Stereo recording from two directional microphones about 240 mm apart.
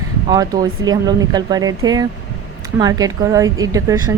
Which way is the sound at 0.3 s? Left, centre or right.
Centre.